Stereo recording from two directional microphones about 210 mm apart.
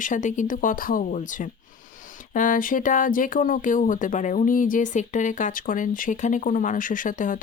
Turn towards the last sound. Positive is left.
turn(degrees=40)  # may be behind; listen again after turning